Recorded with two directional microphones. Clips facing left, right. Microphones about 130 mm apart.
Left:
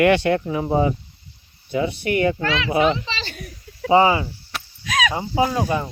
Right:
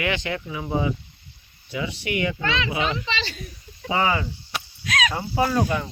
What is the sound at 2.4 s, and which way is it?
Speech, 5° left (ahead or behind).